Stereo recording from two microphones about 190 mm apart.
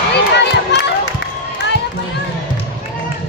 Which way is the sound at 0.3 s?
65° left (ahead or behind).